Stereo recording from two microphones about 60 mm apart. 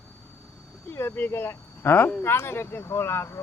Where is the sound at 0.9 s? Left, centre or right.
Left.